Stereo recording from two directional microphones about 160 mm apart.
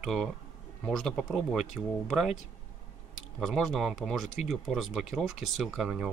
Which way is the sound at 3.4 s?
Centre (ahead or behind).